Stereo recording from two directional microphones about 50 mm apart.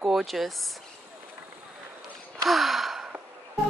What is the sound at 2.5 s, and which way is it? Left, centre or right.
Gasp, centre.